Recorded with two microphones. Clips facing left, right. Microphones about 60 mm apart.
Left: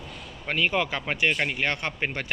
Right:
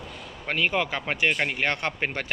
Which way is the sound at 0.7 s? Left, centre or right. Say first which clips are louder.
Even; right.